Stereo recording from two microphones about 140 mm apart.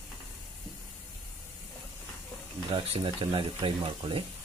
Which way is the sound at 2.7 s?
40° right (ahead or behind).